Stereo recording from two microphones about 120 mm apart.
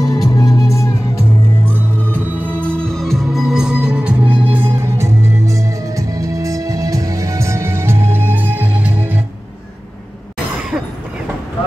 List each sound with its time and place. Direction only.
0.0 s music: 30° left (ahead or behind)
1.7 s music: 15° left (ahead or behind); by 9.2 s 15° right (ahead or behind)